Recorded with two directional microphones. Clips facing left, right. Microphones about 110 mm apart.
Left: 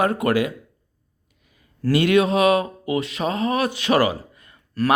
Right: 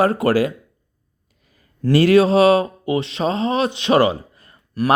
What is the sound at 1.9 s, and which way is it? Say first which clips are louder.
Speech: right 5 dB; 35° right (ahead or behind).